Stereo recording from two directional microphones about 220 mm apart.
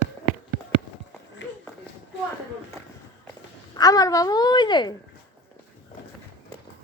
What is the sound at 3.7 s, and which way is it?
A child's voice, 15° left (ahead or behind).